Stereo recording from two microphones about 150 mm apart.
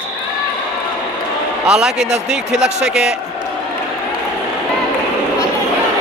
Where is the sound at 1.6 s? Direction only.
5° right (ahead or behind).